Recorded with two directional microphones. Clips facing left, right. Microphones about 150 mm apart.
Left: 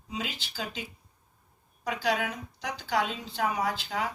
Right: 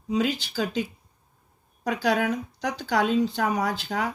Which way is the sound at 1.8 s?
50° right (ahead or behind).